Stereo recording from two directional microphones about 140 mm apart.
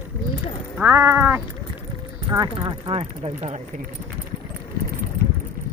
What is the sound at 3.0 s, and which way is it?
Speech, 50° right (ahead or behind).